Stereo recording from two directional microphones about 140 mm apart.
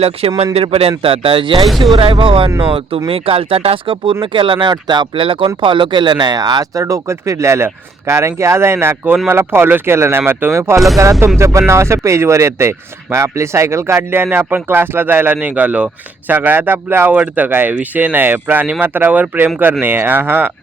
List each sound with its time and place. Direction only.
0.0 s speech: 45° right (ahead or behind)
1.6 s speech: centre (ahead or behind)
1.9 s speech: 40° right (ahead or behind); by 20.5 s 15° right (ahead or behind)